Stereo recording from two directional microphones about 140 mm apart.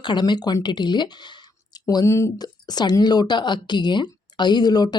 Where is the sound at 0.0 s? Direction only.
30° left (ahead or behind).